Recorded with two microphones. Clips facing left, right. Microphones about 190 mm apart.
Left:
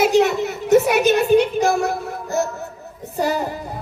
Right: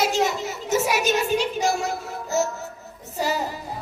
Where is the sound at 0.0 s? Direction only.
60° left (ahead or behind).